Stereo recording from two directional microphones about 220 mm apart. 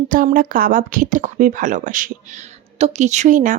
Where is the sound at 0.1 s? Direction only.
40° right (ahead or behind).